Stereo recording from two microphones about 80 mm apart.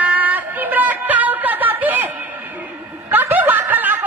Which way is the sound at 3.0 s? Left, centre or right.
Right.